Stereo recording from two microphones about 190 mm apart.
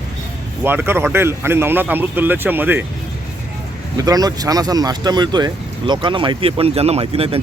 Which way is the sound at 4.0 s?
20° right (ahead or behind).